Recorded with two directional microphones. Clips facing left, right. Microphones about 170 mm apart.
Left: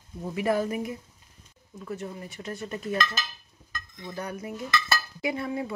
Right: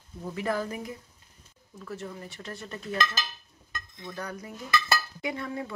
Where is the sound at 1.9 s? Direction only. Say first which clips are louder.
Left 3 dB; 20° left (ahead or behind).